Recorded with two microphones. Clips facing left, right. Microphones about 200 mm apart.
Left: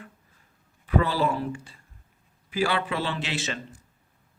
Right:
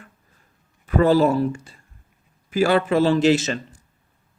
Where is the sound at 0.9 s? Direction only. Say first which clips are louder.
Right 8 dB; 45° right (ahead or behind).